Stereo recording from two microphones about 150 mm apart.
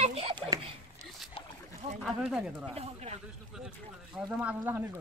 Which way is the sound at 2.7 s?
45° right (ahead or behind).